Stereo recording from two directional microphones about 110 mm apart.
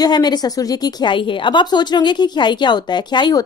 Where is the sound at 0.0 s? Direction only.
40° left (ahead or behind).